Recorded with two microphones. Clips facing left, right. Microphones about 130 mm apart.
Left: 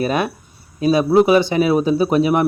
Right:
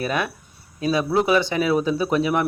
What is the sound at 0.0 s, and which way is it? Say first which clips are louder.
Speech: left 5 dB; 25° left (ahead or behind).